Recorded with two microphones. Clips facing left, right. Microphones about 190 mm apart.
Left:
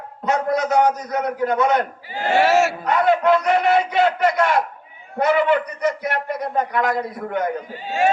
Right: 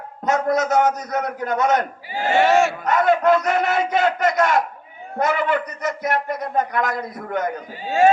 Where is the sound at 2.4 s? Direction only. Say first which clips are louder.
Right 1 dB; 5° left (ahead or behind).